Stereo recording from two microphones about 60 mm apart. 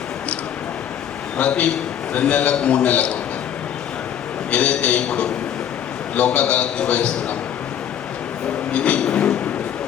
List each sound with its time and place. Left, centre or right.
1.4 s a man's voice: left
4.5 s a man's voice: left
8.7 s train: left